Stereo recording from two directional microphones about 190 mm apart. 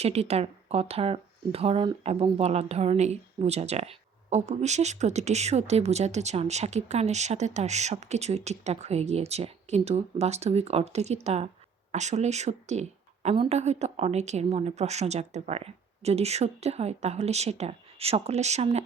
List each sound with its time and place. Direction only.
0.0 s speech: 35° right (ahead or behind)